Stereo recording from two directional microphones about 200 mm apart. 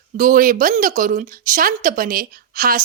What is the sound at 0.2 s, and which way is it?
Speech, 45° right (ahead or behind).